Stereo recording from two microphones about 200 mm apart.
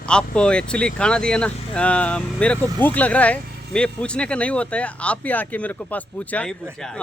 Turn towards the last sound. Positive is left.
turn(degrees=5)  # may be behind; listen again after turning